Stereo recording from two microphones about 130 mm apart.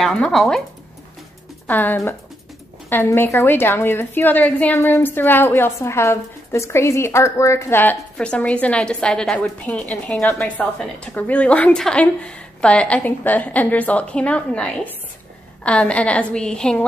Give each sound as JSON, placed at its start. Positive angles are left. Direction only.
{"t": 0.0, "sound": "speech", "side_deg": 0}
{"t": 1.7, "sound": "a woman's voice", "side_deg": 15}